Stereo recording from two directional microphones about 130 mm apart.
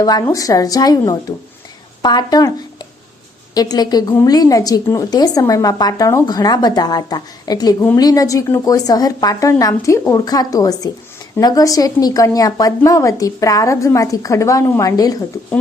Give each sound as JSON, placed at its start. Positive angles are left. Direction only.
{"t": 0.0, "sound": "a woman's voice", "side_deg": 30}
{"t": 3.5, "sound": "a woman's voice", "side_deg": 30}